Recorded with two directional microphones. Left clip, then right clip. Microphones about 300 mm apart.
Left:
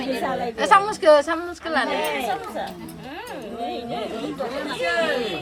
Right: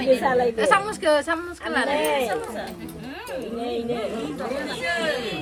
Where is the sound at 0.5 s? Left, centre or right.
Centre.